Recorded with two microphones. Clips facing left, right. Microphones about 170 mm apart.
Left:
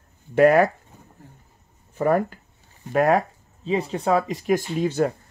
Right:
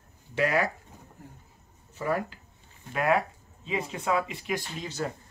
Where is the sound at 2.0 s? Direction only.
50° left (ahead or behind).